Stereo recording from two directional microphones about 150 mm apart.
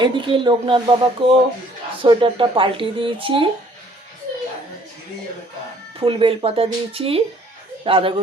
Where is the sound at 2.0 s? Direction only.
35° right (ahead or behind).